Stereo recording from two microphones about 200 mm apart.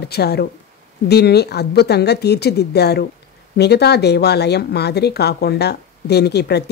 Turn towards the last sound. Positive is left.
turn(degrees=55)  # may be behind; listen again after turning